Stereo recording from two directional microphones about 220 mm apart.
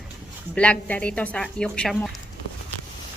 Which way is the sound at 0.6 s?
5° left (ahead or behind).